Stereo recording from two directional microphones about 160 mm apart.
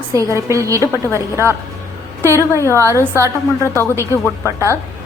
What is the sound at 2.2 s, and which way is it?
A woman's voice, 15° right (ahead or behind).